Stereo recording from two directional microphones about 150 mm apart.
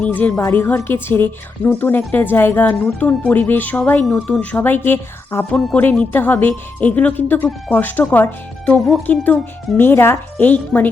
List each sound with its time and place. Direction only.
0.0 s a woman's voice: 10° left (ahead or behind)